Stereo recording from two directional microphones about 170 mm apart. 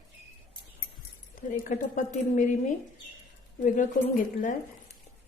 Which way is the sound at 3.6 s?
50° left (ahead or behind).